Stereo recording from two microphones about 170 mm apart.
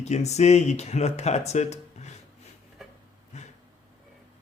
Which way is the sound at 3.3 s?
40° left (ahead or behind).